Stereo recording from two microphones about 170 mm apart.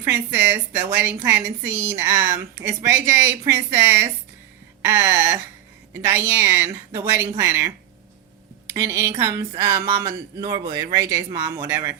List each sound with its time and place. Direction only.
0.0 s a woman's voice: 15° right (ahead or behind)